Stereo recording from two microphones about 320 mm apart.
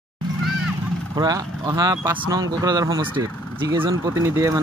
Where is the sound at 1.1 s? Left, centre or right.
Centre.